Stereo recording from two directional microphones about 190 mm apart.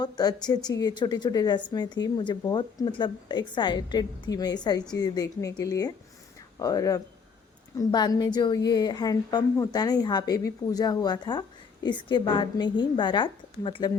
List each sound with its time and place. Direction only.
0.0 s a woman's voice: 20° left (ahead or behind)